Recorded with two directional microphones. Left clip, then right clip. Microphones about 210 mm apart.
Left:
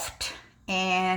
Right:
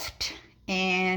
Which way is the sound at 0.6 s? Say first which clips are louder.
Left 1 dB; 90° right.